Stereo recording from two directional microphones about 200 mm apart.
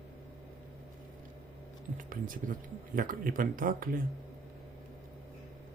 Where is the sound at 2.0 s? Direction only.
45° right (ahead or behind).